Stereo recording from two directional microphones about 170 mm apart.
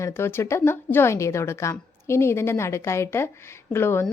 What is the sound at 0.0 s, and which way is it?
A woman's voice, 15° left (ahead or behind).